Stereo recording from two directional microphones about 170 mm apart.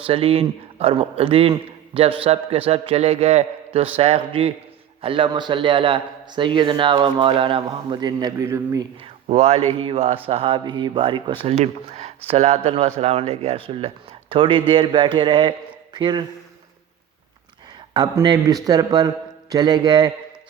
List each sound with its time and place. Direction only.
0.0 s a man's voice: 35° right (ahead or behind); by 8.9 s 15° right (ahead or behind)
9.0 s a man's voice: 40° right (ahead or behind)
17.9 s a man's voice: 25° right (ahead or behind)